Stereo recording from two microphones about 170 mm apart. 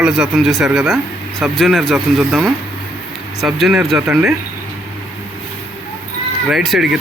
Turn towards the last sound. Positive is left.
turn(degrees=0)  # may be behind; listen again after turning